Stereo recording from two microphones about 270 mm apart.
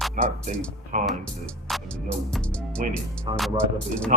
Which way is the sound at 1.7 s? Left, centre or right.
Centre.